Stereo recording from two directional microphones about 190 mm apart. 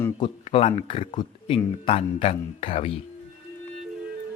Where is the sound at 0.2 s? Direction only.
30° left (ahead or behind).